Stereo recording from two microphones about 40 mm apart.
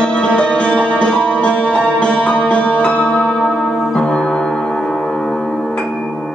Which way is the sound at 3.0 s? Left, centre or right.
Left.